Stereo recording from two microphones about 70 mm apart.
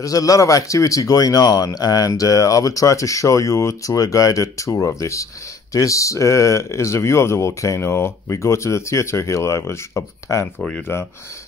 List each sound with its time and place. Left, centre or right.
0.0 s speech: left